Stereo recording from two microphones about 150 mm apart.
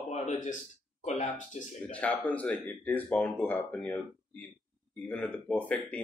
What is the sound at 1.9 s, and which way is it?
Speech, 10° left (ahead or behind).